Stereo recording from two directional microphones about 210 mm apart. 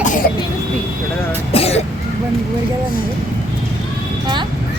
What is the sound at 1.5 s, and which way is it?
Speech, 30° left (ahead or behind).